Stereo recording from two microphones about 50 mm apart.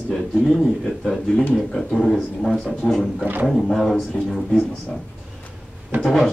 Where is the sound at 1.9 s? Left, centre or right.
Centre.